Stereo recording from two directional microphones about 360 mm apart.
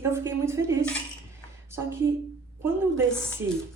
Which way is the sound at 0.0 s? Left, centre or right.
Centre.